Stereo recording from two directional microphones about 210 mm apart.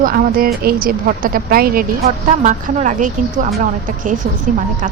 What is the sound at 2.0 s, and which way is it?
Speech, 35° right (ahead or behind).